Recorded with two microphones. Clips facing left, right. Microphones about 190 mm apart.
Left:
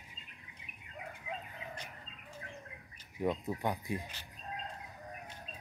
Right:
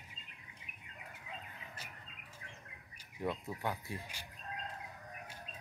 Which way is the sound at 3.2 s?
15° left (ahead or behind).